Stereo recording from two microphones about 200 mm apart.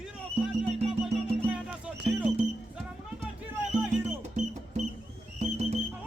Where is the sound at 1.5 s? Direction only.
5° right (ahead or behind).